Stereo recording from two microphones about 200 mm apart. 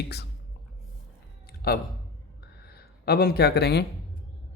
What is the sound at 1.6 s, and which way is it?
Speech, 50° left (ahead or behind).